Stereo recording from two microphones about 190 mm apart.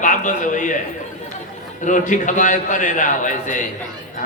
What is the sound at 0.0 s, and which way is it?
Speech, 40° left (ahead or behind).